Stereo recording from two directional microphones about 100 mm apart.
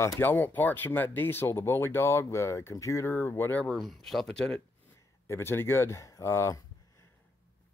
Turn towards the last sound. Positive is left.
turn(degrees=25)  # may be behind; listen again after turning